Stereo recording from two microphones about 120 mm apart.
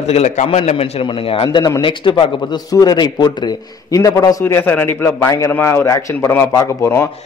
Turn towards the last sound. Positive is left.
turn(degrees=20)  # may be behind; listen again after turning